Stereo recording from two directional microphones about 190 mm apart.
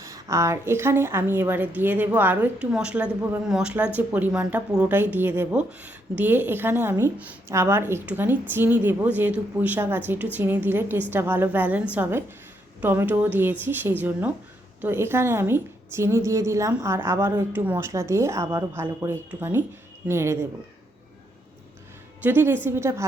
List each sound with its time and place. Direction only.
0.0 s a woman's voice: 15° right (ahead or behind)
22.2 s a woman's voice: 10° right (ahead or behind)